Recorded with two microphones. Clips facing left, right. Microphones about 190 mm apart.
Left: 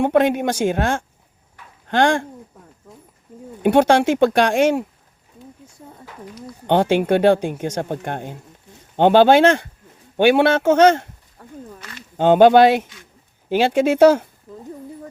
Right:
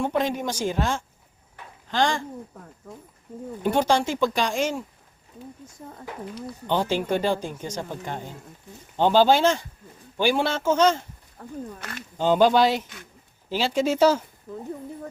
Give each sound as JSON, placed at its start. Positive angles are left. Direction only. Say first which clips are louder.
{"t": 0.0, "sound": "speech", "louder": "left 8 dB", "side_deg": 65}
{"t": 3.6, "sound": "speech", "louder": "left 7 dB", "side_deg": 65}
{"t": 6.7, "sound": "speech", "louder": "left 8 dB", "side_deg": 65}
{"t": 11.8, "sound": "speech", "louder": "right 2 dB", "side_deg": -55}
{"t": 12.1, "sound": "speech", "louder": "left 7 dB", "side_deg": 65}